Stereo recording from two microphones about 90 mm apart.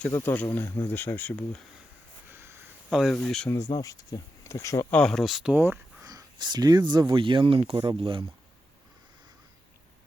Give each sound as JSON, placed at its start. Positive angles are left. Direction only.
{"t": 0.1, "sound": "speech", "side_deg": 30}
{"t": 2.3, "sound": "a sound", "side_deg": -30}
{"t": 2.9, "sound": "speech", "side_deg": 0}
{"t": 3.8, "sound": "speech", "side_deg": 40}
{"t": 4.9, "sound": "speech", "side_deg": 10}
{"t": 5.2, "sound": "speech", "side_deg": -5}
{"t": 5.5, "sound": "speech", "side_deg": -20}
{"t": 6.0, "sound": "speech", "side_deg": -45}
{"t": 7.8, "sound": "speech", "side_deg": -65}